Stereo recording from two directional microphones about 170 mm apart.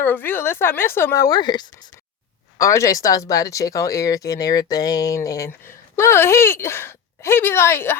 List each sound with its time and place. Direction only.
0.0 s speech: 10° left (ahead or behind)